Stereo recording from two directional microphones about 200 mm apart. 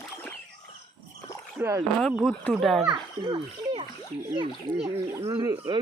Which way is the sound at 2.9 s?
25° right (ahead or behind).